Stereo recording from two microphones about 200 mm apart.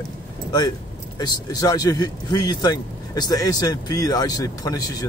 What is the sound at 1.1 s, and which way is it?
Speech, 20° left (ahead or behind).